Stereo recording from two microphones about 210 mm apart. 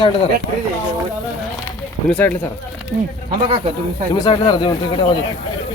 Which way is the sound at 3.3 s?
25° right (ahead or behind).